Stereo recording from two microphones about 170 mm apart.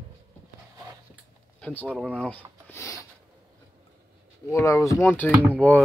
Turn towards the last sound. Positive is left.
turn(degrees=10)  # may be behind; listen again after turning